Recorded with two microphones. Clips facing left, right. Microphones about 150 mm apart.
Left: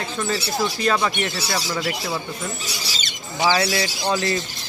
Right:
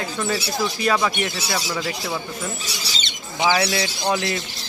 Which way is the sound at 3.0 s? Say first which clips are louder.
Even; 20° right (ahead or behind).